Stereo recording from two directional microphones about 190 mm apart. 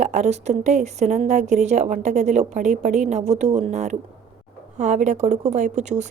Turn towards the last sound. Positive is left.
turn(degrees=-35)  # may be behind; listen again after turning